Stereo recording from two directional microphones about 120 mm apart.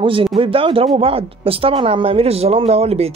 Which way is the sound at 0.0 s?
45° right (ahead or behind).